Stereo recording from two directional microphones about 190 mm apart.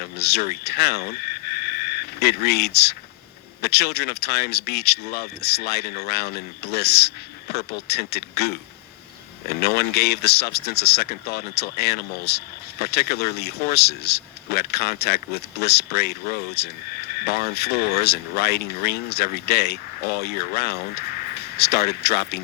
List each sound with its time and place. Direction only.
0.2 s speech: 60° left (ahead or behind)
2.1 s speech: 55° left (ahead or behind)